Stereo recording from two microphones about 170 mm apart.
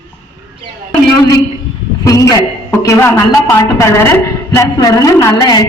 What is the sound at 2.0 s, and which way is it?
A man's voice, 20° left (ahead or behind).